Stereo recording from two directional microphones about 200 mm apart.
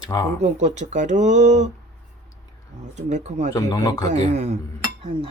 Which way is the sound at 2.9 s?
35° right (ahead or behind).